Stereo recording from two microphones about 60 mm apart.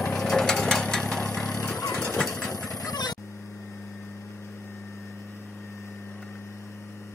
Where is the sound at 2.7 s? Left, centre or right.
Left.